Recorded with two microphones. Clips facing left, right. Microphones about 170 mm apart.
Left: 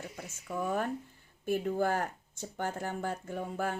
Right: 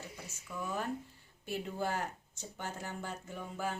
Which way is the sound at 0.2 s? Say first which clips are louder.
Left 8 dB; 50° left (ahead or behind).